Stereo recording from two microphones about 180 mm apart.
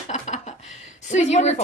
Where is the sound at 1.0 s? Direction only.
40° left (ahead or behind).